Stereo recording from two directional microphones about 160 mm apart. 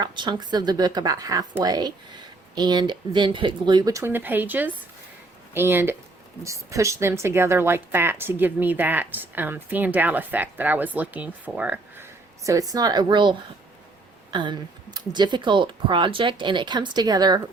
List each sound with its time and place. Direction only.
0.0 s speech: 25° right (ahead or behind); by 12.0 s 10° right (ahead or behind)
12.5 s speech: 20° right (ahead or behind)